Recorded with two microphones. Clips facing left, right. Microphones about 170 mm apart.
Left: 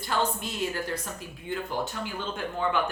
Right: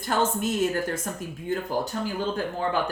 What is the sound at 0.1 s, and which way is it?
Speech, 45° right (ahead or behind).